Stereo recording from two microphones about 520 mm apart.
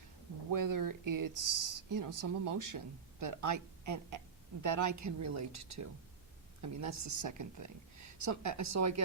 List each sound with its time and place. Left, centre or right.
0.5 s speech: right